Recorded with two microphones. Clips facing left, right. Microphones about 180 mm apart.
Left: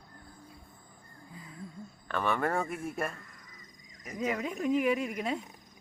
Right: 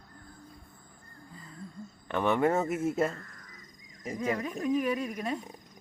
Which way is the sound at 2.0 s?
20° right (ahead or behind).